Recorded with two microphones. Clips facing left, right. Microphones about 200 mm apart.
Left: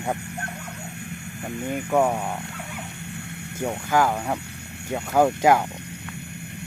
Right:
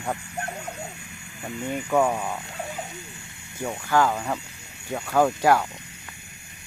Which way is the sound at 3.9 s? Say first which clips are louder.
Even; 10° left (ahead or behind).